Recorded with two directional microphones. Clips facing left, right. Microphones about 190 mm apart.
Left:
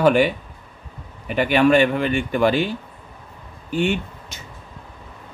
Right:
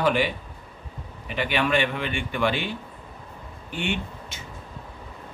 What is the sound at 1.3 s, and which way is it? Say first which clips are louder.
Speech: left 8 dB; 45° left (ahead or behind).